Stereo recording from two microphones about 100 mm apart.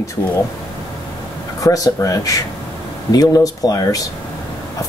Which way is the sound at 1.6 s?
35° left (ahead or behind).